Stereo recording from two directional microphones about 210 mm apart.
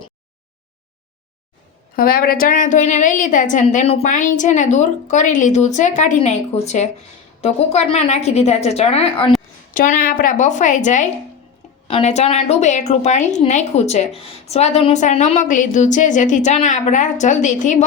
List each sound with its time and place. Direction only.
2.0 s a woman's voice: 45° left (ahead or behind); by 9.3 s 25° left (ahead or behind)
9.7 s a woman's voice: 40° left (ahead or behind)